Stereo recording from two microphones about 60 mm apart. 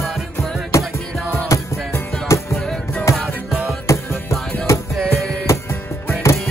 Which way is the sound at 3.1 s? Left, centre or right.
Centre.